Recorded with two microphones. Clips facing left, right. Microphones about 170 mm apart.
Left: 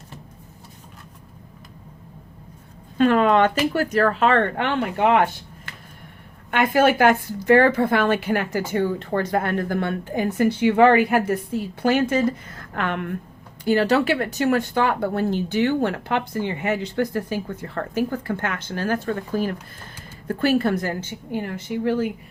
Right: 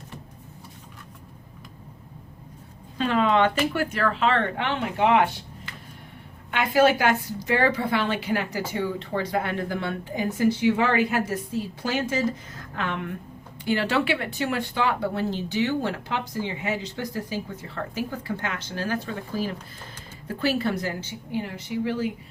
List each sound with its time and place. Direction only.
3.0 s speech: 50° left (ahead or behind)
6.5 s a woman's voice: 50° left (ahead or behind)
13.7 s speech: 40° left (ahead or behind)